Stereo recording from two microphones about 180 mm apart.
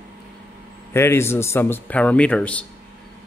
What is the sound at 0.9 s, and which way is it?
Speech, 15° left (ahead or behind).